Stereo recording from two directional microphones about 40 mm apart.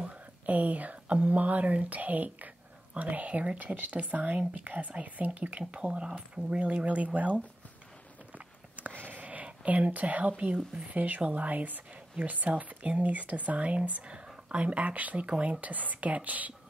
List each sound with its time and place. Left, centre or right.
0.1 s speech: right
8.4 s a sound: right
9.7 s speech: right